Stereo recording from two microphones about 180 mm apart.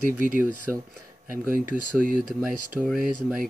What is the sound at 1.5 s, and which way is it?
Speech, 50° right (ahead or behind).